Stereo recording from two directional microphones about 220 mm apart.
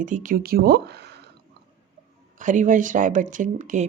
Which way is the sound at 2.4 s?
35° right (ahead or behind).